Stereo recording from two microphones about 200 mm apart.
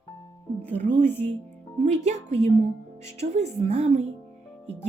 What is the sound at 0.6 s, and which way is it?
Speech, 10° left (ahead or behind).